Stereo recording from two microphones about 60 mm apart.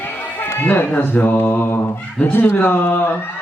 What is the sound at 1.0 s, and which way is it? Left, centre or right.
Speech, left.